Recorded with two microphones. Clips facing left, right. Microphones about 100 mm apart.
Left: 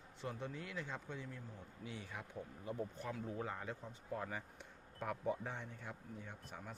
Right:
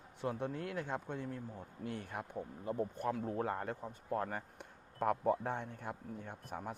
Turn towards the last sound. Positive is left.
turn(degrees=-55)  # may be behind; listen again after turning